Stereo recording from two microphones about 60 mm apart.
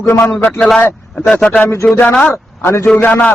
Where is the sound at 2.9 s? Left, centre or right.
Left.